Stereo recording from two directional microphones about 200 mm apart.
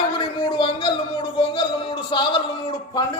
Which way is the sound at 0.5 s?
25° left (ahead or behind).